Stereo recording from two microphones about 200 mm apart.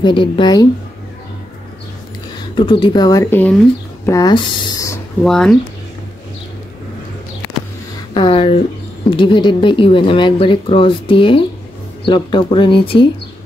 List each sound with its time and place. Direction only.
0.0 s a woman's voice: 25° left (ahead or behind)
2.5 s a woman's voice: 25° left (ahead or behind)
5.2 s speech: 5° left (ahead or behind)
8.1 s a woman's voice: 25° left (ahead or behind)